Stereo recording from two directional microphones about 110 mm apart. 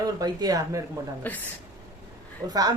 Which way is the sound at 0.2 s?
35° right (ahead or behind).